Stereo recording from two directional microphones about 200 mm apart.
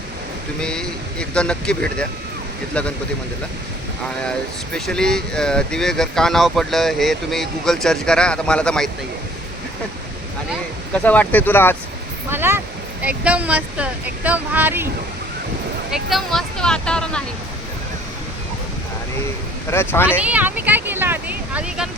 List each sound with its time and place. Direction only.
0.6 s speech: 5° left (ahead or behind)
4.2 s speech: 5° left (ahead or behind)
10.9 s speech: 5° left (ahead or behind)
12.3 s speech: 10° right (ahead or behind)
15.9 s speech: centre (ahead or behind)
19.7 s speech: 10° left (ahead or behind)
20.1 s speech: 5° right (ahead or behind)